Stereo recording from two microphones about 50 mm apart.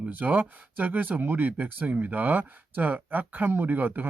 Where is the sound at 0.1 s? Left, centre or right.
Right.